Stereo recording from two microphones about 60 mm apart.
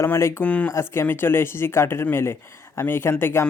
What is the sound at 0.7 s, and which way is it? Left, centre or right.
A man's voice, left.